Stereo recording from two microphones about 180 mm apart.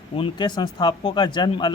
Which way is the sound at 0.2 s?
25° left (ahead or behind).